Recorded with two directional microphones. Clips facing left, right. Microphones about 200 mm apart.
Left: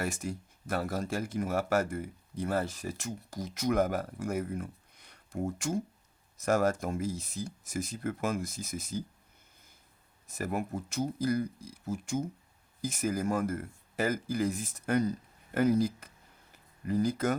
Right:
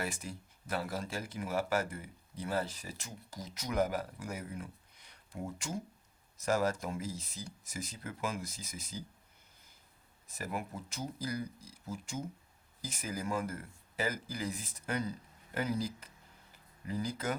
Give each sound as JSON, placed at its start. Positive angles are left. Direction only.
{"t": 0.0, "sound": "speech", "side_deg": 45}
{"t": 10.2, "sound": "speech", "side_deg": 45}